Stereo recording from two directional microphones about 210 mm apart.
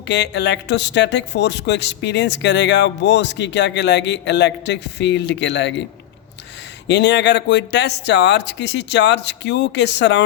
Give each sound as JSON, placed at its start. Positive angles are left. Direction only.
{"t": 0.1, "sound": "speech", "side_deg": 55}
{"t": 6.8, "sound": "speech", "side_deg": 55}